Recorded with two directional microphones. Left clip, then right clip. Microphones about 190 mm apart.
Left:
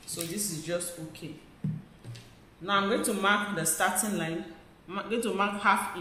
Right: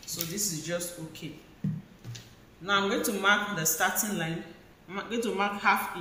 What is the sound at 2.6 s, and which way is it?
Speech, 25° left (ahead or behind).